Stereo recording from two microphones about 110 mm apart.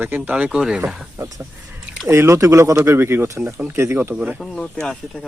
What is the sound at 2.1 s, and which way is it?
Speech, 30° right (ahead or behind).